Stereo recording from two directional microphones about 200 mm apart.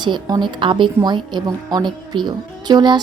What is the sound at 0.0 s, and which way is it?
Speech, 20° right (ahead or behind).